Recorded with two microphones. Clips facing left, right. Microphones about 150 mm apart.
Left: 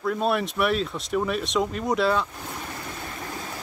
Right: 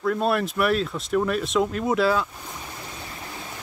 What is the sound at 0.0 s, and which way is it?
Speech, centre (ahead or behind).